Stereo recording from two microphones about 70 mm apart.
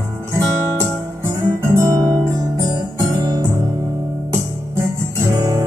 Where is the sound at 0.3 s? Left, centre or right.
Right.